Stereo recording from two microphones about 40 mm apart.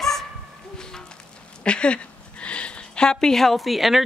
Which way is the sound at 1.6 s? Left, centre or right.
Left.